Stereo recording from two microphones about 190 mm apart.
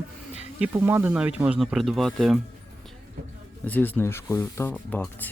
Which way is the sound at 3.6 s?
10° left (ahead or behind).